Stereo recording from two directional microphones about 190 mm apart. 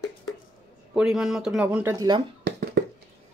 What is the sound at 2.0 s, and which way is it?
Speech, 25° right (ahead or behind).